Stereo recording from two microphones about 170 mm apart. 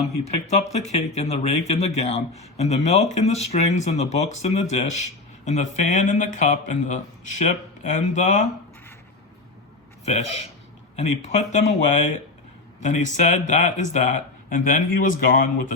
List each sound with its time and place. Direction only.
0.0 s speech: 40° left (ahead or behind)
10.1 s speech: 40° left (ahead or behind)